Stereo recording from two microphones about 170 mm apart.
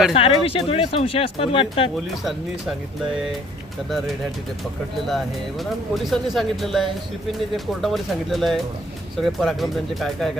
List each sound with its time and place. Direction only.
0.1 s speech: 35° left (ahead or behind)
3.8 s speech: centre (ahead or behind)